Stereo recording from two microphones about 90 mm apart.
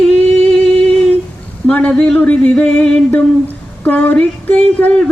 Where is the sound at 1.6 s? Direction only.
15° left (ahead or behind).